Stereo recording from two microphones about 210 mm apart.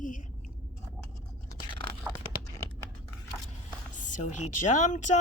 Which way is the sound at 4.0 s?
35° left (ahead or behind).